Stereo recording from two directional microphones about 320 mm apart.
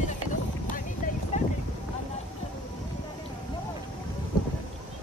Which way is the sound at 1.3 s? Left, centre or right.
Left.